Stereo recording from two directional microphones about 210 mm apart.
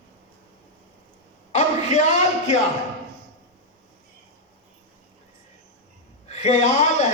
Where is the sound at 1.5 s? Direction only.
35° left (ahead or behind).